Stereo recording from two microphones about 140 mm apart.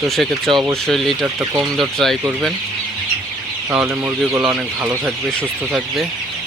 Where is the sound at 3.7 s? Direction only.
10° right (ahead or behind).